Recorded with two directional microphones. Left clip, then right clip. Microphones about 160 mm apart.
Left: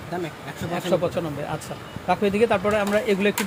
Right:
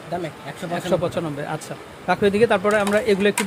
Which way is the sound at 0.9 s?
20° right (ahead or behind).